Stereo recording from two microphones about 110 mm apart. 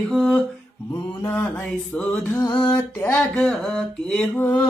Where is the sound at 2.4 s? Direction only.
45° left (ahead or behind).